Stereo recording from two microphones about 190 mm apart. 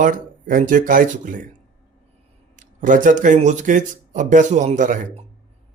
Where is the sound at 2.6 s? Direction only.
45° right (ahead or behind).